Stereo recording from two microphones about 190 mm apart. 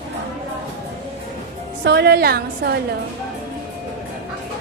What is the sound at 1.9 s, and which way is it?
Speech, 60° right (ahead or behind).